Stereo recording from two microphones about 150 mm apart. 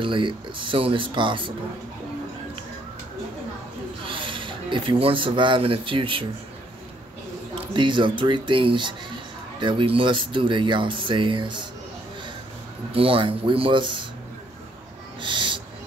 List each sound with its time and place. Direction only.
0.0 s speech: 35° right (ahead or behind)
4.0 s speech: 35° right (ahead or behind)
7.5 s speech: 35° right (ahead or behind)
12.9 s speech: 40° right (ahead or behind)
15.1 s owl: 35° right (ahead or behind)